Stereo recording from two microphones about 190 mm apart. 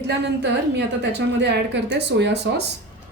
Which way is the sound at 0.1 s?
65° right (ahead or behind).